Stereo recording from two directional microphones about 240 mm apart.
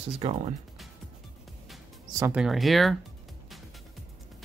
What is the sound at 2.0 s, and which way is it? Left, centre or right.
Speech, centre.